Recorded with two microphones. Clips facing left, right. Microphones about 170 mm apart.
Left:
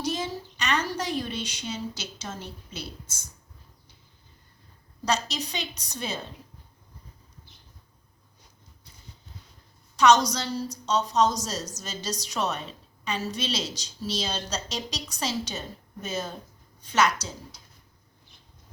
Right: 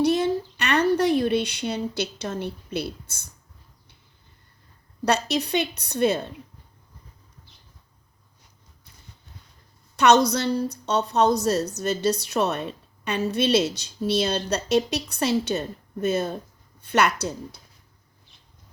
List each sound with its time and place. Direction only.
0.0 s a sound: 60° right (ahead or behind)
5.0 s a woman's voice: 60° right (ahead or behind)
10.0 s a woman's voice: 60° right (ahead or behind)